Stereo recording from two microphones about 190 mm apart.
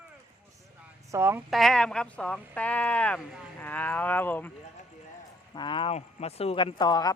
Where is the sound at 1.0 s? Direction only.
15° right (ahead or behind).